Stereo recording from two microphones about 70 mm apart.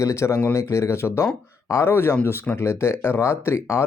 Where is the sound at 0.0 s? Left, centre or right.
Left.